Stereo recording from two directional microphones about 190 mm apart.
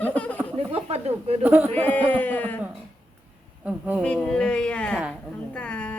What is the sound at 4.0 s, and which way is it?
Speech, 5° left (ahead or behind).